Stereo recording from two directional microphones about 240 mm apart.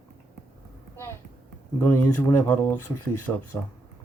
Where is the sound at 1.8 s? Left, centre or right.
Centre.